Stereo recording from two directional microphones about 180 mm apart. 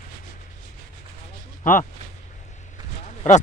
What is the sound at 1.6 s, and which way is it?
Speech, 50° left (ahead or behind).